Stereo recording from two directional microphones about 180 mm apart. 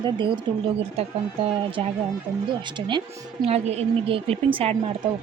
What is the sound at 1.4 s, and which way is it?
A woman's voice, 30° right (ahead or behind).